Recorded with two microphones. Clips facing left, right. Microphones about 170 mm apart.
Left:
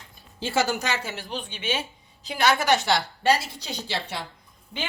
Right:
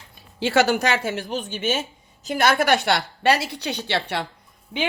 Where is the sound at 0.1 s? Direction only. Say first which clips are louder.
Right 6 dB; 70° right (ahead or behind).